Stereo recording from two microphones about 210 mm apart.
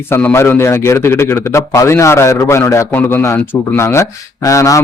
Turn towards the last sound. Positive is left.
turn(degrees=15)  # may be behind; listen again after turning